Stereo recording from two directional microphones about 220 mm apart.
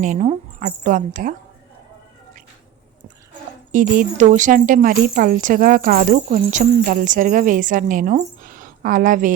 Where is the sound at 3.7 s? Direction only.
35° right (ahead or behind).